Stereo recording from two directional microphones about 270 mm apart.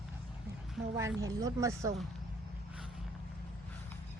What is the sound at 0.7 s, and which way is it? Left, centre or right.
Speech, centre.